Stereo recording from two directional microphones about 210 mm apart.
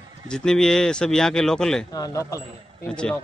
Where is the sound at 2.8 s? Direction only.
5° left (ahead or behind).